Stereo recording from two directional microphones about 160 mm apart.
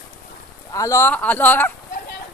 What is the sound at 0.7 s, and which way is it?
Speech, 20° left (ahead or behind).